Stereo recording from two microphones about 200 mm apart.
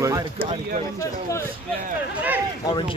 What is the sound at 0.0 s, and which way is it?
Speech, 20° right (ahead or behind).